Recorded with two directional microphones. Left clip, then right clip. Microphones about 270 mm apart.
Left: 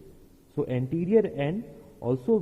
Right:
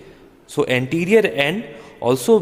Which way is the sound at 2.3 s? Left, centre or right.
Centre.